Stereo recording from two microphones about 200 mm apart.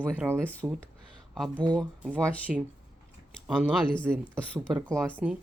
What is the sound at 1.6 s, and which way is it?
Speech, 20° right (ahead or behind).